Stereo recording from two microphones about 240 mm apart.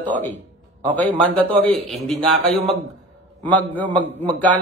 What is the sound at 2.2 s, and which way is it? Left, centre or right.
Speech, right.